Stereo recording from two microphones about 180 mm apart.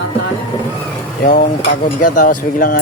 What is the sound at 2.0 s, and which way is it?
Speech, 50° left (ahead or behind).